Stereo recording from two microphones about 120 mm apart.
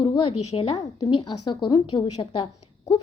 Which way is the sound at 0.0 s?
45° left (ahead or behind).